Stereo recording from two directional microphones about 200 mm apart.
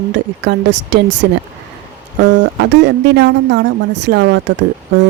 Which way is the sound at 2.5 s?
60° right (ahead or behind).